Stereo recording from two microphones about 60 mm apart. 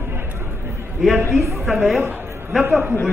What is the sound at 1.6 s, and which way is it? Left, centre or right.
Speech, centre.